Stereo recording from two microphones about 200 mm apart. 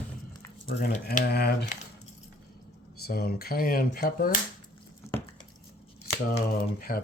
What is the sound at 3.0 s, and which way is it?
Speech, 50° left (ahead or behind).